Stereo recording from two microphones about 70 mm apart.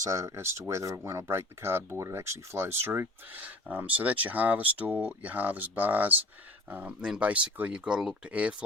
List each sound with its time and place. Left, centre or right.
0.0 s speech: right; by 8.5 s centre